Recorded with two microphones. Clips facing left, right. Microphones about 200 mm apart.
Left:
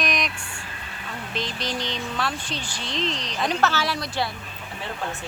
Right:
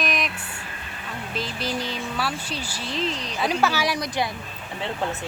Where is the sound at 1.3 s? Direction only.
5° right (ahead or behind).